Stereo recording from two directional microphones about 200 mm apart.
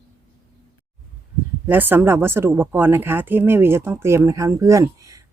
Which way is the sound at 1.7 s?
10° right (ahead or behind).